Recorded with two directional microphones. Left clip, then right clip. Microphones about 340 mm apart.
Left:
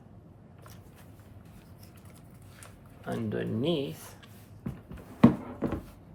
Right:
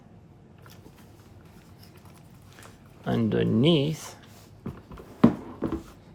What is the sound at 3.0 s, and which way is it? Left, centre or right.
Speech, right.